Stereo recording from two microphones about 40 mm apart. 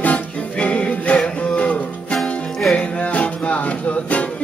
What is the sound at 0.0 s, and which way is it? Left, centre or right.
Music, left.